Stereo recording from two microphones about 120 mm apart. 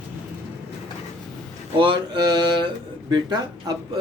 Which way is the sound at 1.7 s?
40° right (ahead or behind).